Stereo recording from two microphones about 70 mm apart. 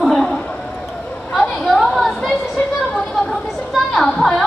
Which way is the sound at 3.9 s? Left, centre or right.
Centre.